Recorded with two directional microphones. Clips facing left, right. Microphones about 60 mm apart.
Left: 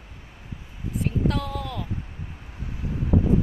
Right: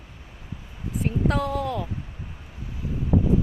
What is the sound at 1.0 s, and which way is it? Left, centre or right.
Speech, centre.